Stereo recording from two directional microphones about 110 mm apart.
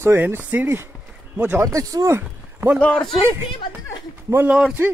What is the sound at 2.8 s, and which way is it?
Speech, 5° left (ahead or behind).